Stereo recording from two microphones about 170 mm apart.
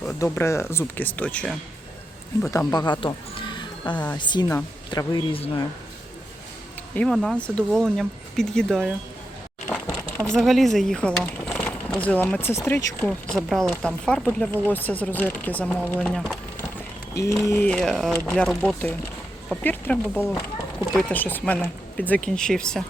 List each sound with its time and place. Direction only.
0.2 s speech: 15° left (ahead or behind)
2.5 s speech: 20° left (ahead or behind)
3.9 s speech: 10° left (ahead or behind)
4.2 s speech: 25° left (ahead or behind)
6.9 s speech: centre (ahead or behind)